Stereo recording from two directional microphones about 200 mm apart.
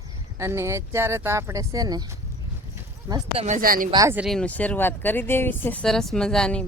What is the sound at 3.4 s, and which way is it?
Speech, 40° right (ahead or behind).